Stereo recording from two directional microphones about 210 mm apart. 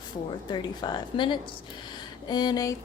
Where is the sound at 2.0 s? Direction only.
20° left (ahead or behind).